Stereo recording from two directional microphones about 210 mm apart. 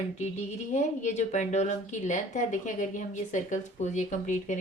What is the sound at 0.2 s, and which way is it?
Speech, 35° left (ahead or behind).